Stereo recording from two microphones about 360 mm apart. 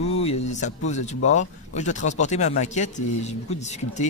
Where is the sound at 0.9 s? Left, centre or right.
Centre.